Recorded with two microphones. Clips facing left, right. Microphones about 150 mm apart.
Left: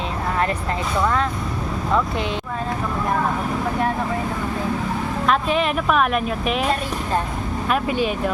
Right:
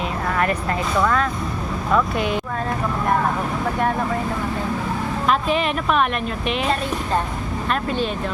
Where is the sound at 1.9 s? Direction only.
25° left (ahead or behind).